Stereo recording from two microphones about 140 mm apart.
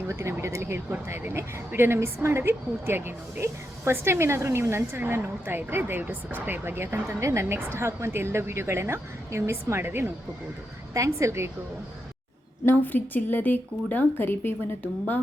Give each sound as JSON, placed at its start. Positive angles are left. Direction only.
{"t": 0.1, "sound": "a woman's voice", "side_deg": -20}
{"t": 12.6, "sound": "speech", "side_deg": 15}